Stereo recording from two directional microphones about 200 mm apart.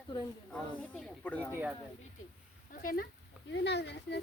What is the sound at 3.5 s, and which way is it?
Speech, 60° left (ahead or behind).